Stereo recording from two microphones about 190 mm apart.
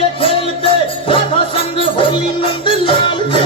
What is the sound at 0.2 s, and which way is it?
Music, 30° left (ahead or behind).